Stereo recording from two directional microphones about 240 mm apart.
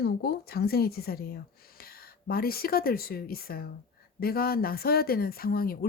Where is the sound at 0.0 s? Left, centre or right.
Left.